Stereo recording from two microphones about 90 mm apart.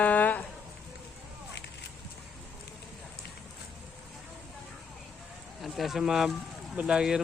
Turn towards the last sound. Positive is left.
turn(degrees=-10)  # may be behind; listen again after turning